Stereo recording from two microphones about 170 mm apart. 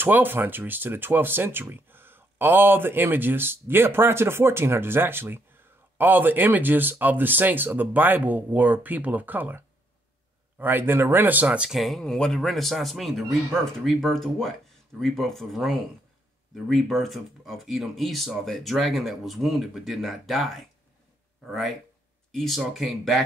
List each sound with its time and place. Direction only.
0.0 s speech: 10° right (ahead or behind)
10.6 s speech: 10° right (ahead or behind)